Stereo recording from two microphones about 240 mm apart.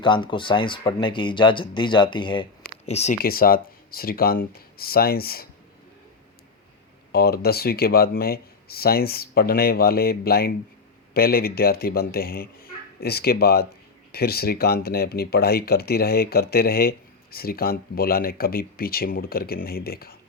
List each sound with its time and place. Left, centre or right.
0.0 s speech: centre
3.2 s speech: left
7.1 s speech: left